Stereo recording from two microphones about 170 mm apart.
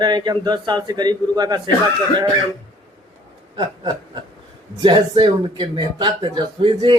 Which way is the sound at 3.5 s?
30° right (ahead or behind).